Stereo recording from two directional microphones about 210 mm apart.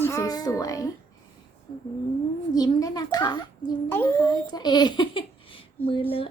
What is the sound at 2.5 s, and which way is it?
A child's voice, 20° left (ahead or behind).